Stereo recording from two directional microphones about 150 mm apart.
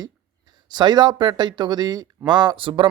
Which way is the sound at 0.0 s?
25° right (ahead or behind).